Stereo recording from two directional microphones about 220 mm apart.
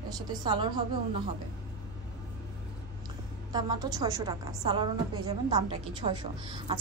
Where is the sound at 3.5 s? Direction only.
15° right (ahead or behind).